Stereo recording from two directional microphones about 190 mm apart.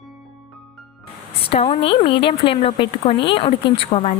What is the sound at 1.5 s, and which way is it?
A woman's voice, 30° left (ahead or behind).